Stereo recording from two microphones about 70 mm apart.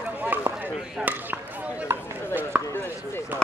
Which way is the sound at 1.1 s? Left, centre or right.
Right.